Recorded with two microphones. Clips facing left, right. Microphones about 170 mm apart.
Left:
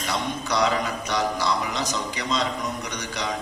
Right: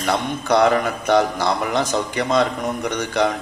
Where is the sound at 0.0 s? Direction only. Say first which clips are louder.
Right 6 dB; 55° right (ahead or behind).